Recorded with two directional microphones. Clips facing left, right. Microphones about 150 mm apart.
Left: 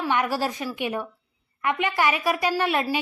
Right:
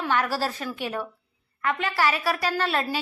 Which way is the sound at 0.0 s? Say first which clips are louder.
Left 1 dB; 15° left (ahead or behind).